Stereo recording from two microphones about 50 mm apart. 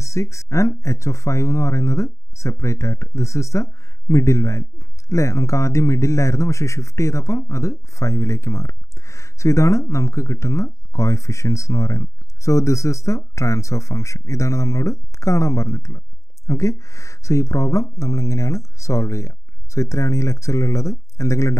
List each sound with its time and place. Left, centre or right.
0.0 s speech: left